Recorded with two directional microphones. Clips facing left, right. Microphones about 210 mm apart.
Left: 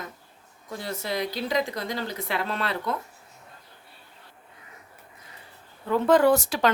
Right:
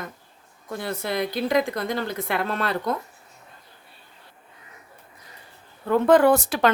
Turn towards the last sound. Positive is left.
turn(degrees=-55)  # may be behind; listen again after turning